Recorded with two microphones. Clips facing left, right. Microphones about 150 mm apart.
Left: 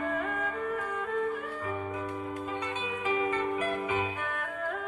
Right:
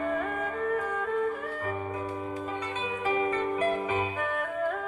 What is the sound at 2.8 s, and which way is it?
Music, 40° right (ahead or behind).